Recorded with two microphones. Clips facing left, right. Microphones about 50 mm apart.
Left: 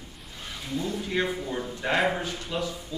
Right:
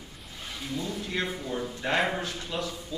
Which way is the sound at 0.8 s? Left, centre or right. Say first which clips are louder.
Left 4 dB; centre.